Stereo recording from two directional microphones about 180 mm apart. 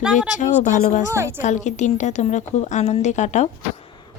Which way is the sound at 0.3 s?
40° left (ahead or behind).